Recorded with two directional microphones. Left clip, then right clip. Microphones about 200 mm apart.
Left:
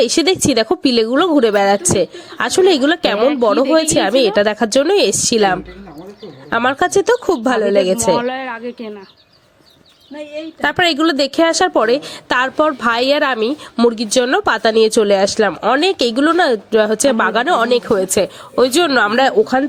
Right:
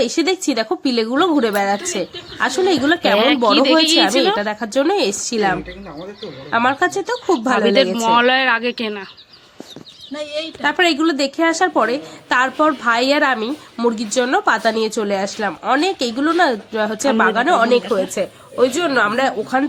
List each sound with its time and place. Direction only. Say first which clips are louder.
0.0 s a woman's voice: left 4 dB; 40° left (ahead or behind)
7.9 s speech: right 3 dB; centre (ahead or behind)
10.3 s a woman's voice: left 1 dB; 50° left (ahead or behind)